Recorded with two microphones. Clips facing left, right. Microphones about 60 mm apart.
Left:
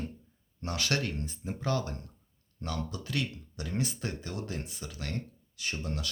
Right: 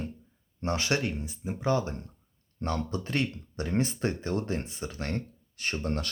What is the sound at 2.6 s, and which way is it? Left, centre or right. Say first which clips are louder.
Speech: right 5 dB; right.